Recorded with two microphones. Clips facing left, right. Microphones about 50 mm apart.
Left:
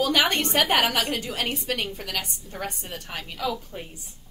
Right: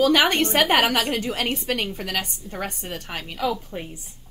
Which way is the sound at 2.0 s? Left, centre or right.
Right.